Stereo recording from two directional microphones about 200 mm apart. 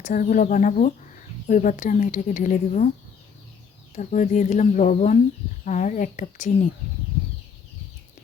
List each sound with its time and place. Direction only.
0.0 s speech: 40° left (ahead or behind)
3.9 s speech: 40° left (ahead or behind)